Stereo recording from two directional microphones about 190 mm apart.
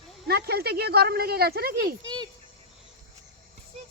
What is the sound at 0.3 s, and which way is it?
Speech, 55° right (ahead or behind).